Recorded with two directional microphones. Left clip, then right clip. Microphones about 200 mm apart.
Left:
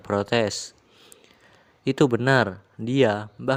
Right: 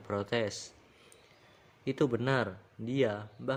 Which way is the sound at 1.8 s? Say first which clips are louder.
Left 10 dB; 40° left (ahead or behind).